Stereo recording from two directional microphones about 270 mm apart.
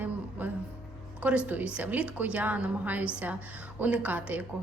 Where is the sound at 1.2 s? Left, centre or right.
Centre.